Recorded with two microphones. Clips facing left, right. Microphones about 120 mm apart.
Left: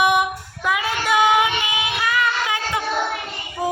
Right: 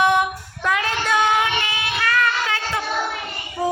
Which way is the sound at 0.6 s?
10° left (ahead or behind).